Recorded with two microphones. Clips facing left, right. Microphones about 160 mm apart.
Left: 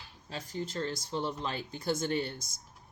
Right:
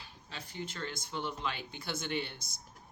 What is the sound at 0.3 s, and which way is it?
Speech, 40° left (ahead or behind).